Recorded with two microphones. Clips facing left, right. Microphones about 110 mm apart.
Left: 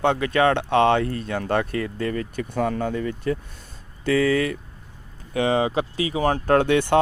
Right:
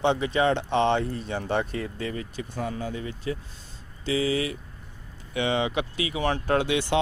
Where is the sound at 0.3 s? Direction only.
60° left (ahead or behind).